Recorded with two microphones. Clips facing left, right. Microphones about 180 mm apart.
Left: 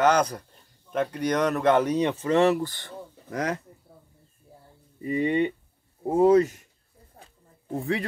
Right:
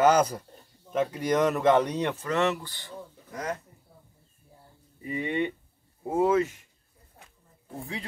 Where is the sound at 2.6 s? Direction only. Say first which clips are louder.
Left 13 dB; 50° left (ahead or behind).